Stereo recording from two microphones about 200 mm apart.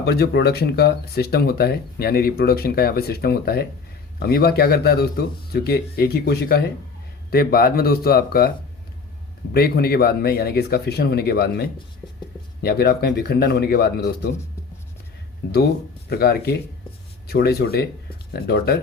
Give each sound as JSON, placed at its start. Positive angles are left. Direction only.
{"t": 0.0, "sound": "speech", "side_deg": 55}
{"t": 12.6, "sound": "speech", "side_deg": 50}
{"t": 15.4, "sound": "speech", "side_deg": 55}